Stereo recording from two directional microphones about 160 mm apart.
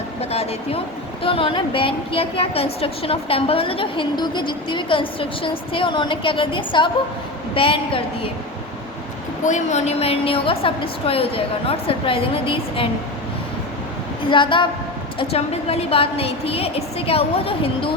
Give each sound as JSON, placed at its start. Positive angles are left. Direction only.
{"t": 0.2, "sound": "a woman's voice", "side_deg": 40}
{"t": 9.4, "sound": "a woman's voice", "side_deg": 50}
{"t": 14.3, "sound": "a woman's voice", "side_deg": 30}